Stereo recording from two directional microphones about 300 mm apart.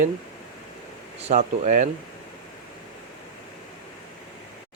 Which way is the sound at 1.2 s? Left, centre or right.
Right.